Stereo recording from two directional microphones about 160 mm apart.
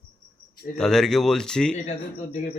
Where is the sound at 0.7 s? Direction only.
5° left (ahead or behind).